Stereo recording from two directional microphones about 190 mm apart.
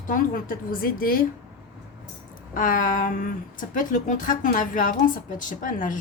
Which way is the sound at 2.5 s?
45° left (ahead or behind).